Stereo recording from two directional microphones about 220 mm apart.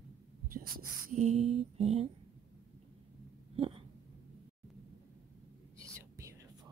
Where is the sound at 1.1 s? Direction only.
30° right (ahead or behind).